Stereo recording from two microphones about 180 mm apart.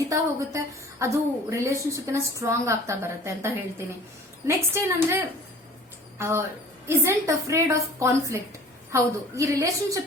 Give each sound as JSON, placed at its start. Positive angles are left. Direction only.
{"t": 0.1, "sound": "a woman's voice", "side_deg": -15}